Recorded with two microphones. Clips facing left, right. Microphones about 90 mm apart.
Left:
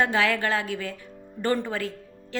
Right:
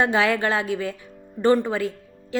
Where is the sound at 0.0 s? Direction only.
20° right (ahead or behind).